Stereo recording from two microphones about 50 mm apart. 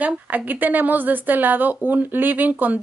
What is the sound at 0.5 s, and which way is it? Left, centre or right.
Speech, right.